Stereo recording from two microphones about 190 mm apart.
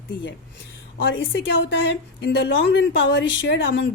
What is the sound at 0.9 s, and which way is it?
A woman's voice, 80° left.